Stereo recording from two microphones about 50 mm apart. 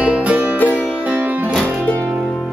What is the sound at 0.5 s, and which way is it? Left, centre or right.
Music, left.